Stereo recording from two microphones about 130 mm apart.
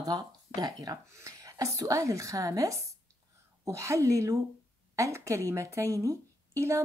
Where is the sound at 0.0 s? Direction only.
30° right (ahead or behind).